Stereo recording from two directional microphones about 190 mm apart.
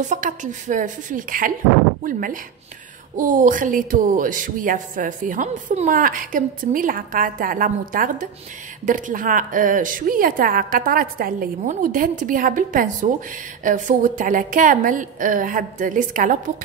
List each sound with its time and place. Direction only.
0.1 s speech: 40° right (ahead or behind)